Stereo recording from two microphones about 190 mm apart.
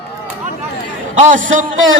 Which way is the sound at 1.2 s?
45° right (ahead or behind).